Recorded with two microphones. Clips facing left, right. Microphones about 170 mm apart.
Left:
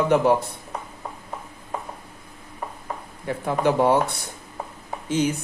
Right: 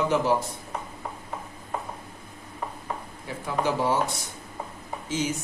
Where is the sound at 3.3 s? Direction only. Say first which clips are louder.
Left 5 dB; 55° left (ahead or behind).